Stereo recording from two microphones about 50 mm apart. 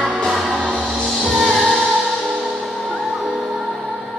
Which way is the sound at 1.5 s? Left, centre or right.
Centre.